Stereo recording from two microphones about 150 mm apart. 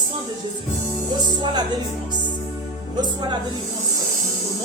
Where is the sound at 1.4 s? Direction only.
30° right (ahead or behind).